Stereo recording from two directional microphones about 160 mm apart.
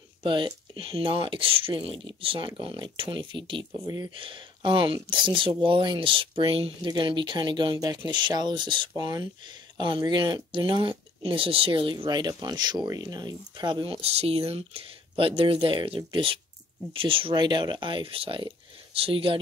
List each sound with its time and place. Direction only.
0.2 s speech: 30° right (ahead or behind)